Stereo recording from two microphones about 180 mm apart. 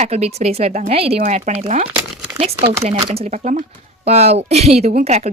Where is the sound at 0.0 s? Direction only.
35° right (ahead or behind).